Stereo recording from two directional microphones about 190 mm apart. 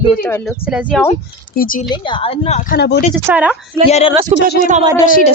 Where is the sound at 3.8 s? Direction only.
35° left (ahead or behind).